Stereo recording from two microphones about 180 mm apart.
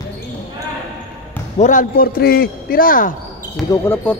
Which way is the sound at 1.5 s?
45° left (ahead or behind).